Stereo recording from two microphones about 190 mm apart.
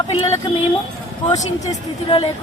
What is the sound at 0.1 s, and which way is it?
Child singing, 30° left (ahead or behind).